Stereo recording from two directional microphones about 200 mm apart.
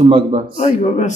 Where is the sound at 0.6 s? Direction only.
35° left (ahead or behind).